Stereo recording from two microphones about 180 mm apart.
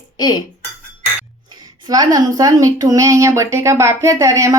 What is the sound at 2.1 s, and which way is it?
Speech, 20° right (ahead or behind).